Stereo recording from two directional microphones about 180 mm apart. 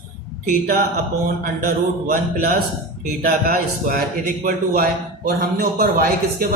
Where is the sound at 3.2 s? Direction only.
50° right (ahead or behind).